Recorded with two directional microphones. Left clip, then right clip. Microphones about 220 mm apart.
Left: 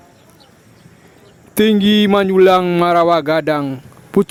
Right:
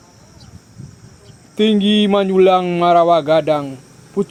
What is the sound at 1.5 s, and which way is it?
Speech, 50° left (ahead or behind).